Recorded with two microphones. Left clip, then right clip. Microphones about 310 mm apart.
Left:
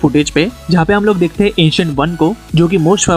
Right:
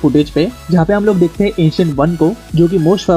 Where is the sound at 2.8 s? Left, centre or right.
Left.